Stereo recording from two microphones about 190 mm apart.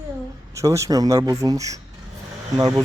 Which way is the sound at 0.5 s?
15° right (ahead or behind).